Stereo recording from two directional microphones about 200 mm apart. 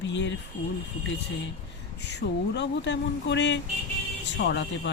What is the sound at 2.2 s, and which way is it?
Speech, 50° left (ahead or behind).